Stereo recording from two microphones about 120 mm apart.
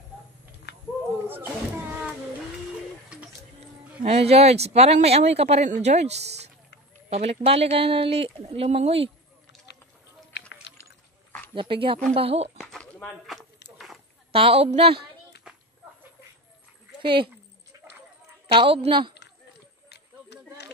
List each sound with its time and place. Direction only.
1.0 s a sound: 15° right (ahead or behind)
4.0 s speech: 60° right (ahead or behind)
11.5 s a woman's voice: 45° right (ahead or behind)
12.1 s speech: 55° right (ahead or behind)
12.5 s a sound: 5° left (ahead or behind)
14.3 s speech: 55° right (ahead or behind)
15.5 s children playing: 5° right (ahead or behind)
17.0 s a woman's voice: 45° right (ahead or behind)
17.7 s clip-clop: 30° right (ahead or behind)
18.5 s a woman's voice: 50° right (ahead or behind)